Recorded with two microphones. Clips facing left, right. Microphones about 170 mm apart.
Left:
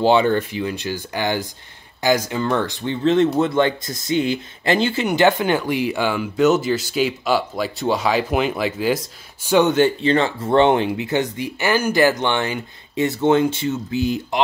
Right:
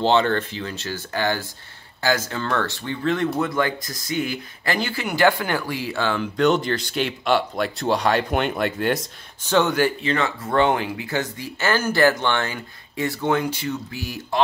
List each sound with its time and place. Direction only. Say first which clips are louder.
0.0 s speech: left 3 dB; 10° left (ahead or behind)
9.5 s speech: left 4 dB; 20° left (ahead or behind)